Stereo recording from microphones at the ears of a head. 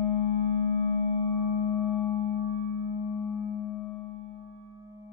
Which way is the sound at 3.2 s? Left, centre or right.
Left.